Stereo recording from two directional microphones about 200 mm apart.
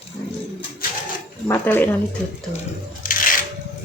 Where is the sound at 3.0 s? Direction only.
45° left (ahead or behind).